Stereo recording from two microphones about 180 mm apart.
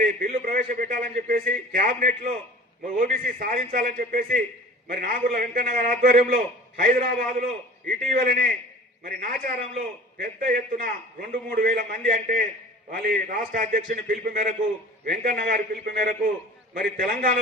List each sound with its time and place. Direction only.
0.2 s a man's voice: 50° right (ahead or behind)